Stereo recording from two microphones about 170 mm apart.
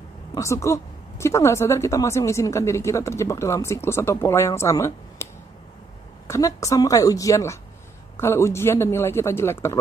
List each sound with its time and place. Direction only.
0.3 s a woman's voice: 20° left (ahead or behind)